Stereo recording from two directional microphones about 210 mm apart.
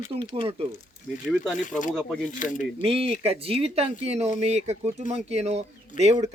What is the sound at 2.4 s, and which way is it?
Speech, 40° left (ahead or behind).